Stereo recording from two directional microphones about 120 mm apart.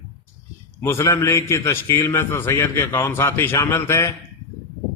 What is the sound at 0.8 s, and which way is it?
A man's voice, 20° left (ahead or behind).